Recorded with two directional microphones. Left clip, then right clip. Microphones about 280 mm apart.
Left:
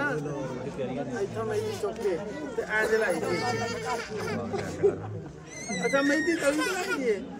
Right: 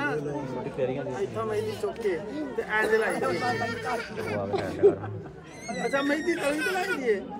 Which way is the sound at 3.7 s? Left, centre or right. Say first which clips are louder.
Right 1 dB; left.